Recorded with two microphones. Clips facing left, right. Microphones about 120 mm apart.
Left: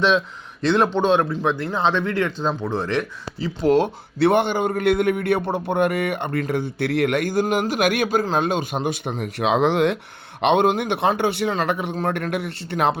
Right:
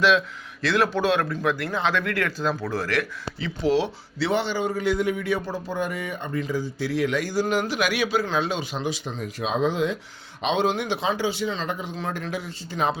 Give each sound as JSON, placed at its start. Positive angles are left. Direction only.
{"t": 0.6, "sound": "speech", "side_deg": 30}
{"t": 3.7, "sound": "a man's voice", "side_deg": 50}
{"t": 10.4, "sound": "a man's voice", "side_deg": 60}
{"t": 11.9, "sound": "a man's voice", "side_deg": 55}